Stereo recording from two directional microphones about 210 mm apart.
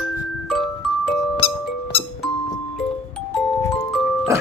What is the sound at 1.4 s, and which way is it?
Music, 25° left (ahead or behind).